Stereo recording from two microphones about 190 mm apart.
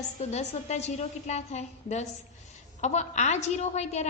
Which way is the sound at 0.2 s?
35° left (ahead or behind).